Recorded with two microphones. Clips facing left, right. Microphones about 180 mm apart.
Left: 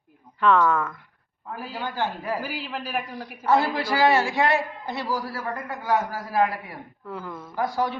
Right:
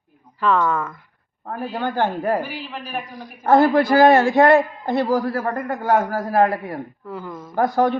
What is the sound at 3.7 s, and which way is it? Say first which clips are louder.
A man's voice: right 8 dB; 50° right (ahead or behind).